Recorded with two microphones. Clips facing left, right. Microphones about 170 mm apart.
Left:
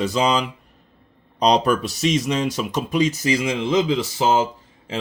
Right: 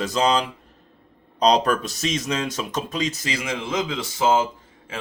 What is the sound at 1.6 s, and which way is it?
Speech, 5° left (ahead or behind).